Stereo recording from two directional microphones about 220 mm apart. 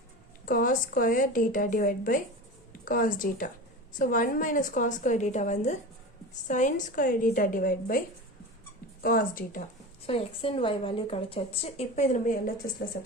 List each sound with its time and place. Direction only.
0.4 s a woman's voice: 40° left (ahead or behind)
10.1 s a woman's voice: 25° left (ahead or behind); by 12.9 s 40° left (ahead or behind)